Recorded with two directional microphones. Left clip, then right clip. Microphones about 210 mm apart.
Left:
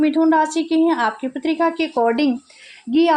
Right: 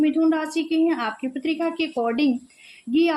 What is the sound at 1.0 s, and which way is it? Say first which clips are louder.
Speech: left 6 dB; 50° left (ahead or behind).